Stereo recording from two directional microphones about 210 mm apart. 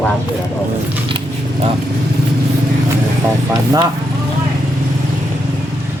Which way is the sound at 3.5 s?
15° right (ahead or behind).